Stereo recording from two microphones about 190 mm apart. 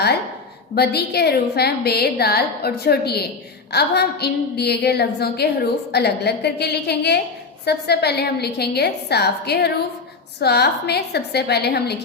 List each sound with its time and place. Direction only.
0.8 s a woman's voice: 60° left (ahead or behind)